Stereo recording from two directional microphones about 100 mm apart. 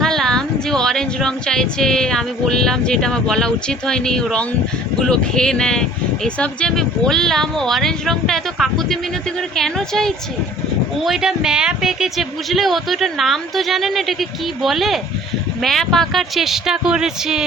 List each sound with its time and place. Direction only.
0.0 s speech: 5° left (ahead or behind)